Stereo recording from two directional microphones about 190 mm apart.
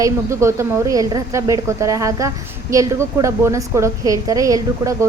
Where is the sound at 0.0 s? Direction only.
15° right (ahead or behind).